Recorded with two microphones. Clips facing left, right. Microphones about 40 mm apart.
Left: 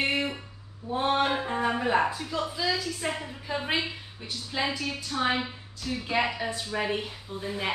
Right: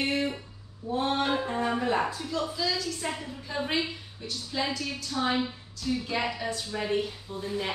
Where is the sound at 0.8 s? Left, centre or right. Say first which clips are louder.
Left 2 dB; centre.